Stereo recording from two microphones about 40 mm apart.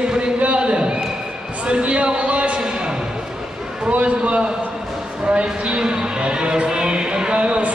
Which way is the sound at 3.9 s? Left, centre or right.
Right.